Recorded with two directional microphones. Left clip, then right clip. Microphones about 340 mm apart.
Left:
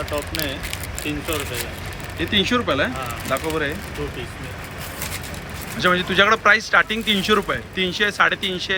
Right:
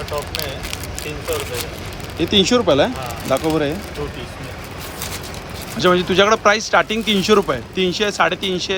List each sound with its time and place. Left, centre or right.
2.1 s speech: centre
5.8 s speech: centre